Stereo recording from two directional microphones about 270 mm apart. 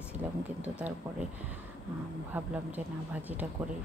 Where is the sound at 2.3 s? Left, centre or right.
Centre.